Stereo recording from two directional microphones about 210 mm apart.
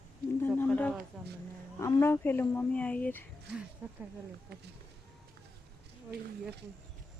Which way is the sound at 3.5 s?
5° right (ahead or behind).